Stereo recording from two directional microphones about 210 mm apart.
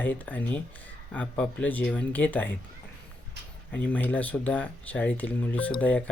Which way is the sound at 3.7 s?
5° left (ahead or behind).